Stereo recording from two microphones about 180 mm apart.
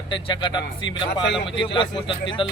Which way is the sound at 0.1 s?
25° left (ahead or behind).